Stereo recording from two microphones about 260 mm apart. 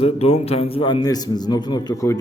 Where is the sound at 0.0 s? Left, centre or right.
Left.